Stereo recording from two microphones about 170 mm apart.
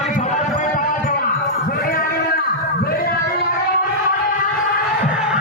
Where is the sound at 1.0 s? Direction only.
55° left (ahead or behind).